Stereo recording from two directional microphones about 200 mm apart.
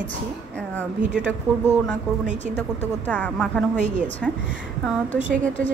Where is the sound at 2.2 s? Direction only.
35° right (ahead or behind).